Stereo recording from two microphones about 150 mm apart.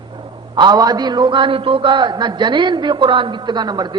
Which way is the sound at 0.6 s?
30° right (ahead or behind).